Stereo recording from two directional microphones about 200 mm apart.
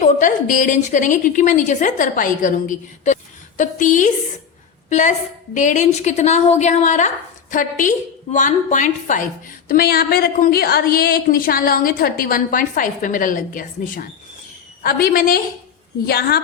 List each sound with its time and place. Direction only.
0.0 s a woman's voice: 40° left (ahead or behind)